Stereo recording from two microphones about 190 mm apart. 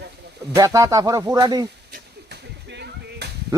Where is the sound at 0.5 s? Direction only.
20° right (ahead or behind).